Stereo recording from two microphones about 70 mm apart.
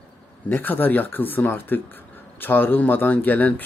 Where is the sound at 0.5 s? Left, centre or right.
Left.